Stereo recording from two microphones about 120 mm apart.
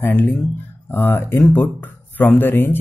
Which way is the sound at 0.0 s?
15° left (ahead or behind).